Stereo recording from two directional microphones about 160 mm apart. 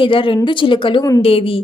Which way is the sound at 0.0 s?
35° left (ahead or behind).